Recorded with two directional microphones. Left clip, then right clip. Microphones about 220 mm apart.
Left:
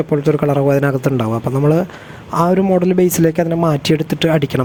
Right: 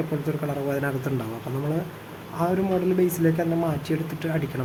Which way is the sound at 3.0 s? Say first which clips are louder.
Left 9 dB; 40° left (ahead or behind).